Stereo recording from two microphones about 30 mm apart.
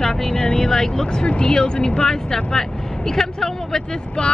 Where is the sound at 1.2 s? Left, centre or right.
Left.